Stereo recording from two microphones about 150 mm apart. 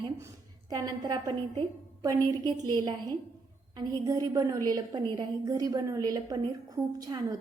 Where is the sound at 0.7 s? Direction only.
25° right (ahead or behind).